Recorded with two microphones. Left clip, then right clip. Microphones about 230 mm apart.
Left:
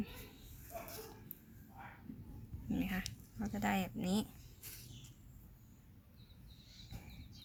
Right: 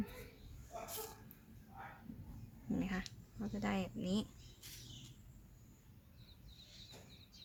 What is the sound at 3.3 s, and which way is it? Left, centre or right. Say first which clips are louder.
Speech: left 3 dB; centre.